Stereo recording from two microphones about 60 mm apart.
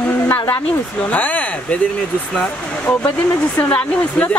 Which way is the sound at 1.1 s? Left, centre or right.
Left.